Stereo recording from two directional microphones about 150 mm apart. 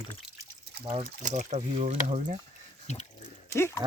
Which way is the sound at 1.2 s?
55° right (ahead or behind).